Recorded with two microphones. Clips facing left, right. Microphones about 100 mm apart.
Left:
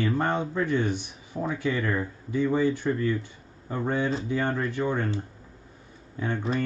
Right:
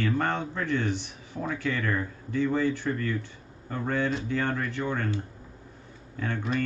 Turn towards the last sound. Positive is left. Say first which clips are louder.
# left 2 dB
turn(degrees=15)  # may be behind; listen again after turning